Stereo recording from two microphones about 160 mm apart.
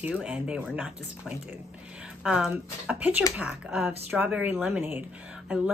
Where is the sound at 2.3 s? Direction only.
5° right (ahead or behind).